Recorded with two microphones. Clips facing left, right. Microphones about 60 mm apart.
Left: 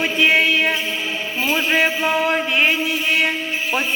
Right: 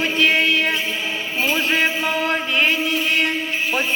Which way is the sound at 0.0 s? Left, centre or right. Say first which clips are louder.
Left 1 dB; centre.